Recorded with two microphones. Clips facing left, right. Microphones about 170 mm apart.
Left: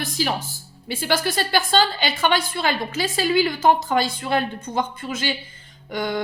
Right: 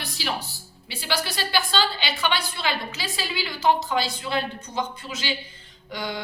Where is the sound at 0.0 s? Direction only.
45° left (ahead or behind).